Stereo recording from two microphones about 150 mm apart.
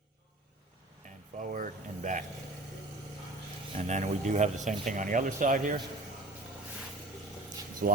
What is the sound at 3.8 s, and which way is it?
Speech, 50° right (ahead or behind).